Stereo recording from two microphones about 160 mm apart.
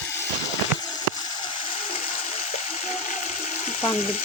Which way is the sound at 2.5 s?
45° left (ahead or behind).